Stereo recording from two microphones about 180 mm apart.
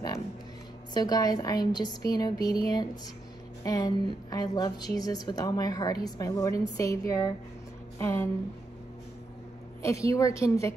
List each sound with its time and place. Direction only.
0.9 s a woman's voice: 20° left (ahead or behind)
9.8 s a woman's voice: 15° left (ahead or behind)